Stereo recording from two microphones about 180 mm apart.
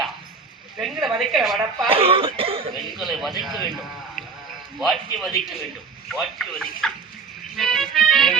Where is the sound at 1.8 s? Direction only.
30° right (ahead or behind).